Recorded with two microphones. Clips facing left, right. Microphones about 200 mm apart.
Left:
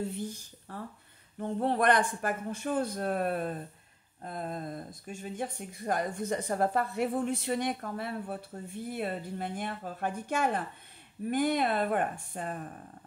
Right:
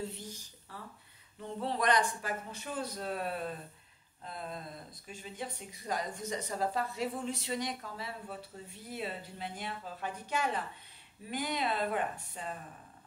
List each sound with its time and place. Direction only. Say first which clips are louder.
0.1 s speech: left 9 dB; 55° left (ahead or behind)